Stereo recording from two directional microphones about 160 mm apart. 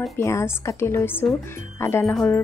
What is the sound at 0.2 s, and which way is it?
Speech, 20° left (ahead or behind).